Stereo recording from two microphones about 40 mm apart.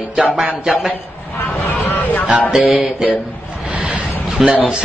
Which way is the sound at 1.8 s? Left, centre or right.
Left.